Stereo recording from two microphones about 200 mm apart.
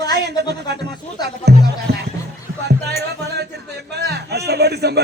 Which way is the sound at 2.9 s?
55° right (ahead or behind).